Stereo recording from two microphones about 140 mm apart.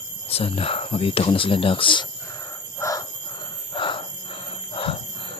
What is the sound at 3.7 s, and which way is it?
Alarm clock, 35° left (ahead or behind).